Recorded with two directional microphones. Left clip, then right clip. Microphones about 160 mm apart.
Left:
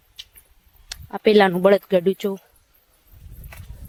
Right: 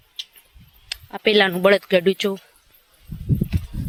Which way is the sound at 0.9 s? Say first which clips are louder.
Left 2 dB; 35° left (ahead or behind).